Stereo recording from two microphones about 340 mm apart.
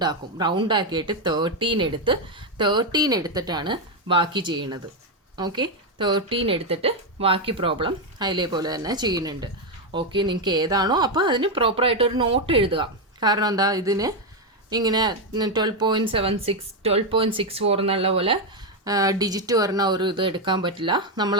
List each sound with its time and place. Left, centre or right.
0.0 s speech: centre